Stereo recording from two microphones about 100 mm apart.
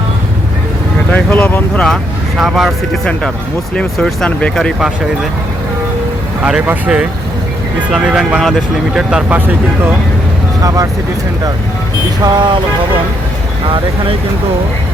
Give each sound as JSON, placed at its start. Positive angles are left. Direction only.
{"t": 1.1, "sound": "speech", "side_deg": 15}
{"t": 2.4, "sound": "speech", "side_deg": 0}
{"t": 6.4, "sound": "speech", "side_deg": -10}
{"t": 10.6, "sound": "speech", "side_deg": -35}
{"t": 12.2, "sound": "speech", "side_deg": -50}